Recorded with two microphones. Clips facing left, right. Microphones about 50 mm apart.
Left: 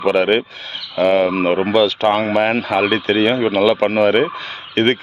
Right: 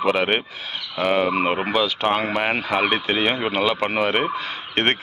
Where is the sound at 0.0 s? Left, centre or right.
Centre.